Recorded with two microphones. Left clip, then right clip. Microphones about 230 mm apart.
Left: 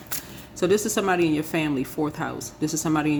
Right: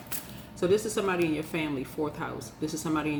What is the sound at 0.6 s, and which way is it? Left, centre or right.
Speech, left.